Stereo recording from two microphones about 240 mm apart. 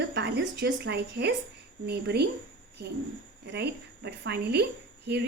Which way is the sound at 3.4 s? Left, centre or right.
Right.